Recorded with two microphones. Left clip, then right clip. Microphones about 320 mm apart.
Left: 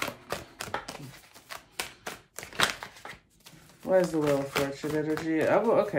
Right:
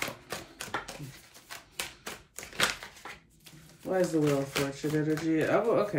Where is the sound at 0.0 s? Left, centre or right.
Centre.